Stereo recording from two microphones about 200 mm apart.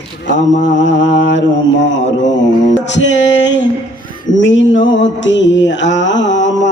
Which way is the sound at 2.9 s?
65° left (ahead or behind).